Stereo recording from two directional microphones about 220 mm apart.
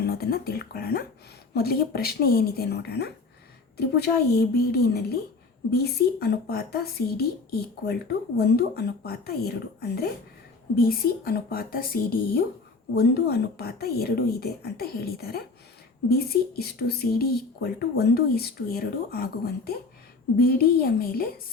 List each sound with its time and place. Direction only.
0.0 s speech: 45° left (ahead or behind)